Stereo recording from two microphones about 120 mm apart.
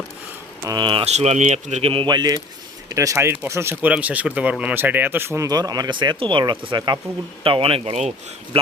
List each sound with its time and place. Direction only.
0.8 s speech: 45° right (ahead or behind)
1.0 s speech: 65° right (ahead or behind)
2.0 s speech: 35° right (ahead or behind); by 5.5 s 20° right (ahead or behind)
5.5 s speech: 35° right (ahead or behind)
7.4 s speech: 50° right (ahead or behind)